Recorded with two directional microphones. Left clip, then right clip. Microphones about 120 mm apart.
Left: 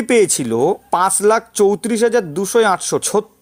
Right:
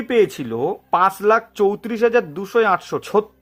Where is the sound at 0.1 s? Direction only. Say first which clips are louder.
Left 3 dB; 40° left (ahead or behind).